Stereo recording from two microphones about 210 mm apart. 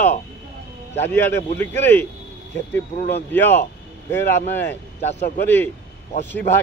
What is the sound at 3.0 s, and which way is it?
Speech, 50° left (ahead or behind).